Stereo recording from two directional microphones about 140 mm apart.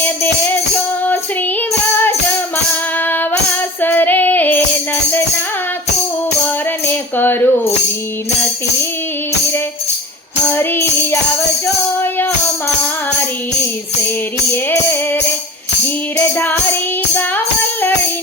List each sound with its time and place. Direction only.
0.0 s music: 15° left (ahead or behind)
3.0 s music: 15° left (ahead or behind)
3.8 s female singing: 15° left (ahead or behind)
6.8 s speech: 15° left (ahead or behind)
10.5 s music: 15° left (ahead or behind)
14.5 s music: 15° left (ahead or behind)